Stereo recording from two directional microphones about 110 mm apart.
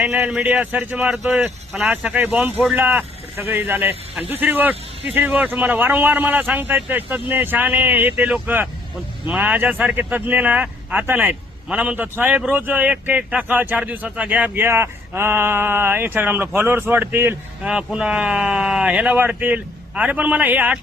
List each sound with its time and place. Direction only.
0.0 s speech: 10° right (ahead or behind)
1.1 s speech: 5° right (ahead or behind)